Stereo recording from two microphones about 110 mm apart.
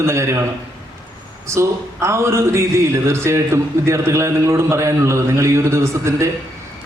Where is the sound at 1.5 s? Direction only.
25° right (ahead or behind).